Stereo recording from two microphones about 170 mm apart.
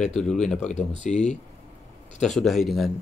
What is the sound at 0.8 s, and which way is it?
Speech, 45° left (ahead or behind).